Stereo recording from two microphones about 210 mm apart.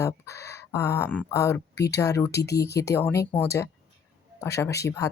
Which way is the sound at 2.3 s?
50° left (ahead or behind).